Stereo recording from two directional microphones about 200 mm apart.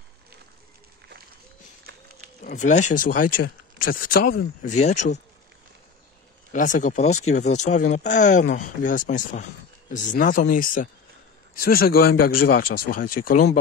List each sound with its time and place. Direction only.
2.4 s speech: 40° left (ahead or behind)
4.7 s speech: 35° left (ahead or behind)
6.5 s speech: 40° left (ahead or behind)